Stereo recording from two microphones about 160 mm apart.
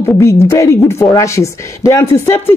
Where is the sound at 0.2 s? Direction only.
15° left (ahead or behind).